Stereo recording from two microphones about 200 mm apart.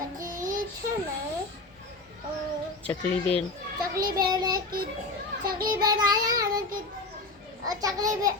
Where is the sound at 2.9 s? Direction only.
5° left (ahead or behind).